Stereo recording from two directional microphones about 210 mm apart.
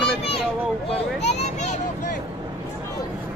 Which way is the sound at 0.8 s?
30° left (ahead or behind).